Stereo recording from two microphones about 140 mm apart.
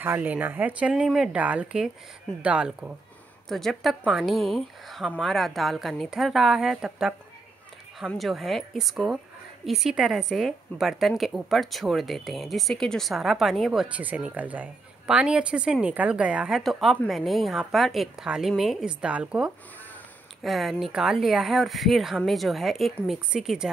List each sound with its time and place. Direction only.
0.0 s a woman's voice: 15° right (ahead or behind)